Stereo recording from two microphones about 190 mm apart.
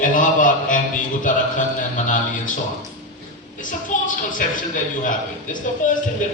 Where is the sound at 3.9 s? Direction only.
40° left (ahead or behind).